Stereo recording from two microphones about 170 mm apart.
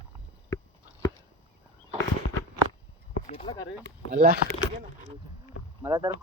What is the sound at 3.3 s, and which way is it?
Speech, 30° left (ahead or behind).